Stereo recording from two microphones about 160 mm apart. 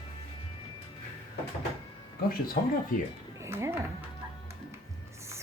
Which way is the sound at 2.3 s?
65° left (ahead or behind).